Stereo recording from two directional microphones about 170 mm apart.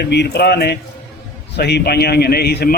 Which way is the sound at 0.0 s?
80° left.